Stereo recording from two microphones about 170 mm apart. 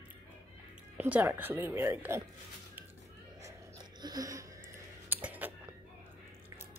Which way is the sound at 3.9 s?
25° right (ahead or behind).